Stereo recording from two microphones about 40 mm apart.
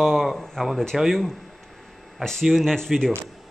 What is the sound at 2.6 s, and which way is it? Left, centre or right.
Speech, centre.